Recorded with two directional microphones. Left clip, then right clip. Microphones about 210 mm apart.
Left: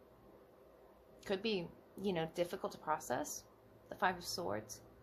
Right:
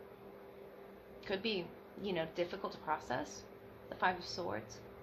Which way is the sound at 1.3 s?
55° left (ahead or behind).